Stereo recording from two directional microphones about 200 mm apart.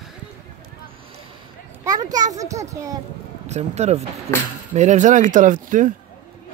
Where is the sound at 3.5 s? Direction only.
35° right (ahead or behind).